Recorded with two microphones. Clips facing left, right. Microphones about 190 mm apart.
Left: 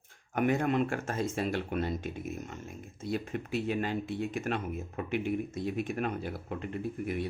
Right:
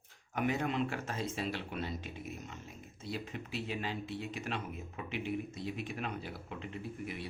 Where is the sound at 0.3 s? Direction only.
50° left (ahead or behind).